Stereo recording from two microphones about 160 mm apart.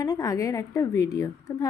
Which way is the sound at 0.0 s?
20° left (ahead or behind).